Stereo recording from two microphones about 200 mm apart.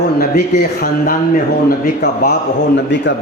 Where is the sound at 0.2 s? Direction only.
50° left (ahead or behind).